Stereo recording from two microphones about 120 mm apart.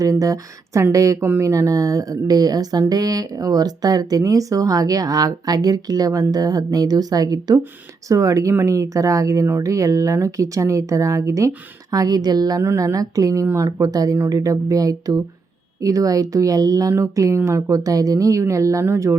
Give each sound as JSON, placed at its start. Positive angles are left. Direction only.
{"t": 0.0, "sound": "speech", "side_deg": -30}